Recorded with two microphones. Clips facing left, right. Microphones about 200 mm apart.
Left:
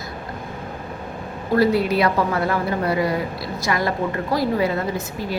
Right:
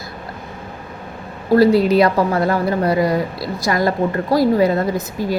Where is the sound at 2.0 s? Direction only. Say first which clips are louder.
Right 5 dB; 40° right (ahead or behind).